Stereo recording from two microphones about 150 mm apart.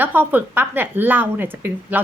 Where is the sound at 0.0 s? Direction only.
10° right (ahead or behind).